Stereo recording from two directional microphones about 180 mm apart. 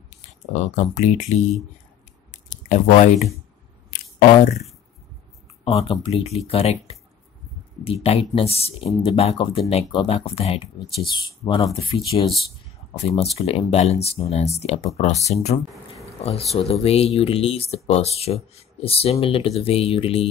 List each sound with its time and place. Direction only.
0.5 s speech: 40° left (ahead or behind)
2.3 s a sound: 40° left (ahead or behind)
5.6 s speech: 35° left (ahead or behind)
7.8 s speech: 35° left (ahead or behind)